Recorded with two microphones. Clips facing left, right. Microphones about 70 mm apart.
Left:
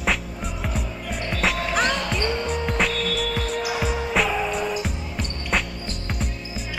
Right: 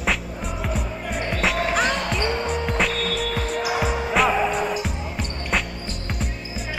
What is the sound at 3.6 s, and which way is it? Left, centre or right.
Music, right.